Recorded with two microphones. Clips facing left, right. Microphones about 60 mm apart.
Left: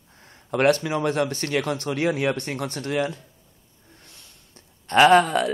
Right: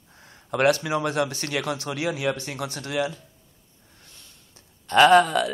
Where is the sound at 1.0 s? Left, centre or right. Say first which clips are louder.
Left 2 dB; centre.